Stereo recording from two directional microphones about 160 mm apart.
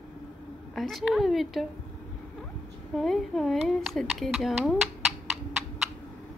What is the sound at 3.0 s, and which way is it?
Speech, centre (ahead or behind).